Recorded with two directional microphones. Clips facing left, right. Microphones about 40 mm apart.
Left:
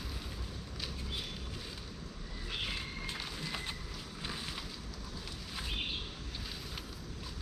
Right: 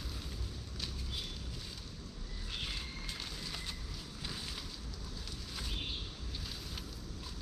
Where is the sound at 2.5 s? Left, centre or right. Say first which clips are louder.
Left 3 dB; left.